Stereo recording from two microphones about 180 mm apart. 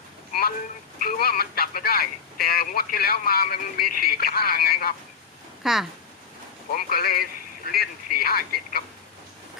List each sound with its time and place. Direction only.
0.9 s speech: 55° left (ahead or behind)
5.6 s speech: centre (ahead or behind)
6.7 s speech: 55° left (ahead or behind)